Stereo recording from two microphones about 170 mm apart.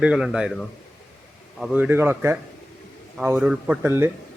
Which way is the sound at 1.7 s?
10° right (ahead or behind).